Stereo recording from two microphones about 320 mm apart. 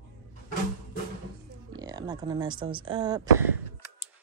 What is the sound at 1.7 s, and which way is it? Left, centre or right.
Speech, centre.